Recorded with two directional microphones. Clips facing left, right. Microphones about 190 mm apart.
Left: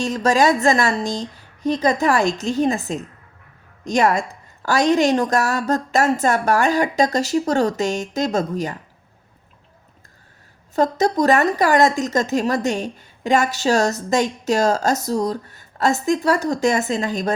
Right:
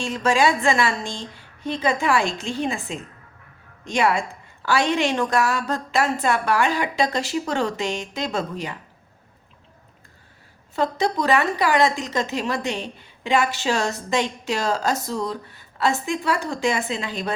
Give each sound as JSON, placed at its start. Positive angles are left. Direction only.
{"t": 0.0, "sound": "a woman's voice", "side_deg": 40}
{"t": 10.8, "sound": "a woman's voice", "side_deg": 45}